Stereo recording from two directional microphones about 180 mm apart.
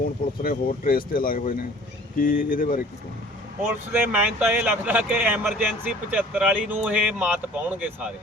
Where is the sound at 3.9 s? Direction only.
10° right (ahead or behind).